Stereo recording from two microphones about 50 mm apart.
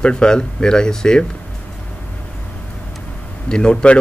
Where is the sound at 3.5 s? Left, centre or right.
Centre.